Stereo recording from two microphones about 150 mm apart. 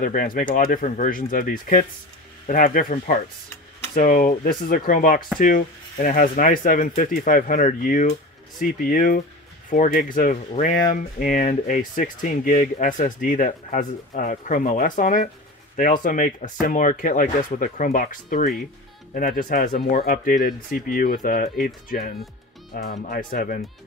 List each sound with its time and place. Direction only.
0.0 s speech: 65° left (ahead or behind)